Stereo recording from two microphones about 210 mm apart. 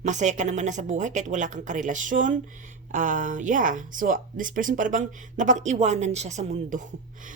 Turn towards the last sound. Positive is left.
turn(degrees=-35)  # may be behind; listen again after turning